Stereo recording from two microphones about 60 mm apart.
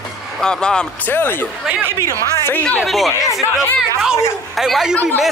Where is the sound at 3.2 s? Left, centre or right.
Centre.